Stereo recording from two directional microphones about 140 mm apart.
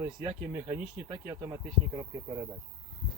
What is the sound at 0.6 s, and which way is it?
Speech, 10° right (ahead or behind).